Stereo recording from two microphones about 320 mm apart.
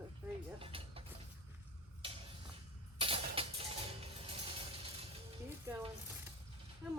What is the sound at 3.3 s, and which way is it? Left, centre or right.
Mechanisms, centre.